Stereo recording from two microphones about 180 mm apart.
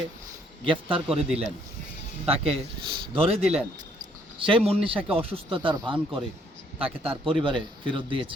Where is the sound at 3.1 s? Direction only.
35° right (ahead or behind).